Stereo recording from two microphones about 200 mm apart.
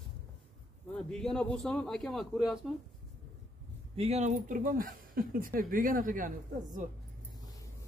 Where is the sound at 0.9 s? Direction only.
5° left (ahead or behind).